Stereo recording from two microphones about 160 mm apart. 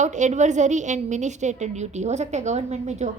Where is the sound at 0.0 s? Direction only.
50° right (ahead or behind).